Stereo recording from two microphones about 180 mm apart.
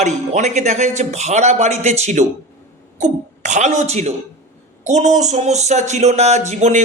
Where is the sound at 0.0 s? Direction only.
40° right (ahead or behind).